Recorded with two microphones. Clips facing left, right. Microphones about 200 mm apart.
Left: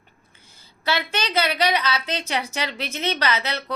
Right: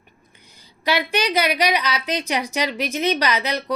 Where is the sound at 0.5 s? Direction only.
15° right (ahead or behind).